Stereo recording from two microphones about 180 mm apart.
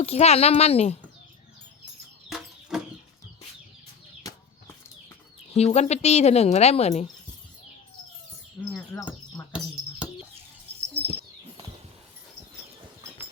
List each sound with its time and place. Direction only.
0.0 s a woman's voice: 35° left (ahead or behind)
2.3 s chicken: 5° right (ahead or behind)
4.2 s bird flight: 20° left (ahead or behind)
5.5 s a woman's voice: 35° left (ahead or behind)
8.6 s speech: 20° left (ahead or behind)
10.0 s bird: 5° right (ahead or behind)
10.8 s a sound: 15° right (ahead or behind)